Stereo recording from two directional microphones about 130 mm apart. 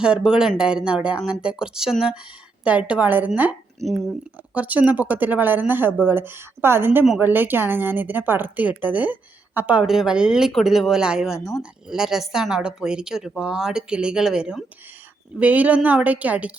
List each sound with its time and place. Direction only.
0.0 s speech: 5° right (ahead or behind)
3.8 s speech: centre (ahead or behind)
4.5 s speech: 10° right (ahead or behind)
11.3 s speech: 25° left (ahead or behind)
11.6 s speech: 5° right (ahead or behind)